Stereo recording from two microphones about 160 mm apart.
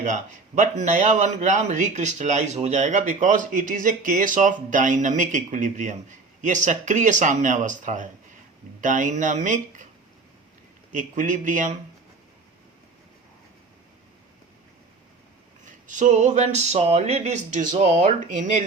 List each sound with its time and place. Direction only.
0.0 s a man's voice: 50° right (ahead or behind)
10.9 s a man's voice: 50° right (ahead or behind)
15.6 s a man's voice: 50° right (ahead or behind)